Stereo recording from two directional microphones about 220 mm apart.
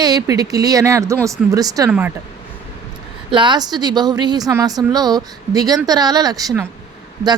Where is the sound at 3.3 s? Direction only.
20° right (ahead or behind).